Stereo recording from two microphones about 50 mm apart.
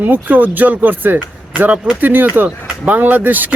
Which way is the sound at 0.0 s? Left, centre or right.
Right.